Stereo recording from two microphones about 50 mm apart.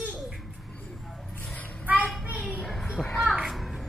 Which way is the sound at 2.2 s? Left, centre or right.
Right.